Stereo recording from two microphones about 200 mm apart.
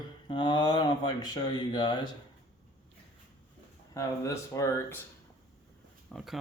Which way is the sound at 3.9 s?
15° left (ahead or behind).